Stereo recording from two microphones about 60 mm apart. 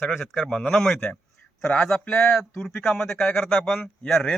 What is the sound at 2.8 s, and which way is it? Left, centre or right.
Speech, left.